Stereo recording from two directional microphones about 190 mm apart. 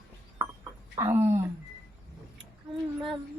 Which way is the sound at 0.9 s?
15° right (ahead or behind).